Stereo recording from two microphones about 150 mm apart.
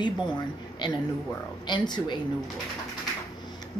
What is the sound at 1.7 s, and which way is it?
Speech, 30° left (ahead or behind).